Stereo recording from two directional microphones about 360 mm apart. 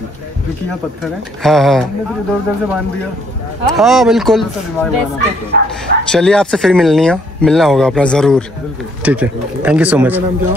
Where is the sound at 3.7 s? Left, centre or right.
Centre.